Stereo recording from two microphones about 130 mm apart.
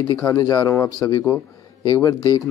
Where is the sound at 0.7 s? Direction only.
20° left (ahead or behind).